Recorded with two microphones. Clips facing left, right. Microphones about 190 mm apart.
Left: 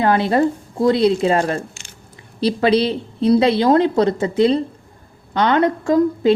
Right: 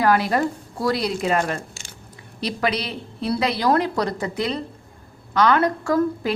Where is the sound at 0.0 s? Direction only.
25° left (ahead or behind).